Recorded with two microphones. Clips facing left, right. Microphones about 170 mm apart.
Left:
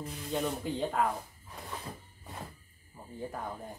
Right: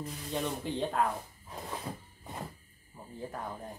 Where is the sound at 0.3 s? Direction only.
Centre (ahead or behind).